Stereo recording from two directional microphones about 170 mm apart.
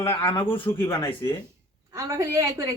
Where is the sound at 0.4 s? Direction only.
30° left (ahead or behind).